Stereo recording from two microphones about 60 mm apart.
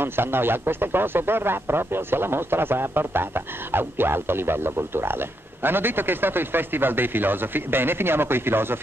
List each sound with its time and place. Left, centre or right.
0.0 s speech: right